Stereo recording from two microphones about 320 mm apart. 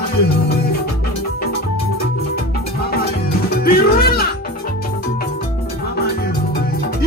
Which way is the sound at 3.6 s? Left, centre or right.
Left.